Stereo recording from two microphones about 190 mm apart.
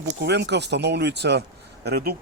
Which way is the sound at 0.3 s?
65° right (ahead or behind).